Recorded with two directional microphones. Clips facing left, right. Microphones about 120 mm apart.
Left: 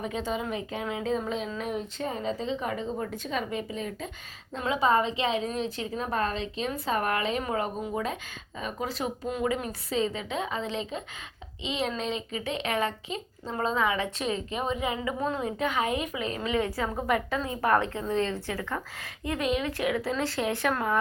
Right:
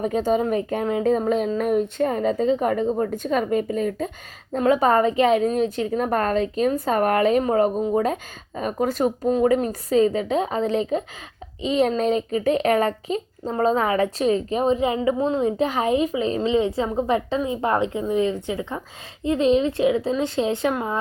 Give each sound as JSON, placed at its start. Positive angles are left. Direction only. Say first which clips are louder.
{"t": 0.0, "sound": "a woman's voice", "louder": "right 10 dB", "side_deg": -45}